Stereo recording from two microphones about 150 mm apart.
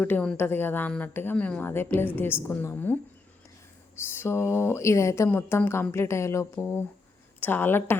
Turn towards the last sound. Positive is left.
turn(degrees=15)  # may be behind; listen again after turning